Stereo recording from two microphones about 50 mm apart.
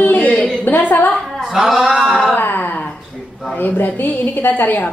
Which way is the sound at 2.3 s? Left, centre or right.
Left.